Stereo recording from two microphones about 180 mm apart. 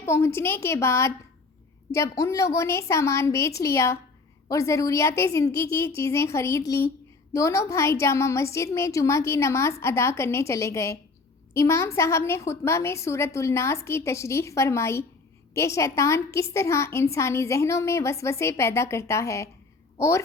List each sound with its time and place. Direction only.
0.0 s a woman's voice: 15° left (ahead or behind)